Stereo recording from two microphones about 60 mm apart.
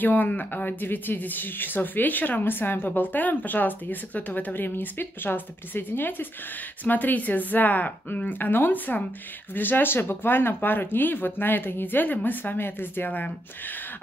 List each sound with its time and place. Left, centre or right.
0.0 s a woman's voice: left